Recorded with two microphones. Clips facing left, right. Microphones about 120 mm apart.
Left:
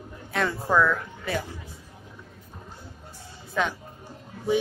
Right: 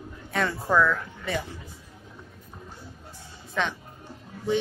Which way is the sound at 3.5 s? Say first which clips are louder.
Left 2 dB; 5° left (ahead or behind).